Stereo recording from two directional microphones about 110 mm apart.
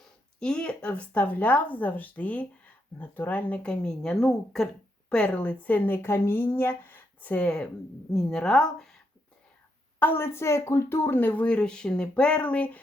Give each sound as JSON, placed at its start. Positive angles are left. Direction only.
{"t": 0.3, "sound": "a woman's voice", "side_deg": 5}
{"t": 10.0, "sound": "speech", "side_deg": 20}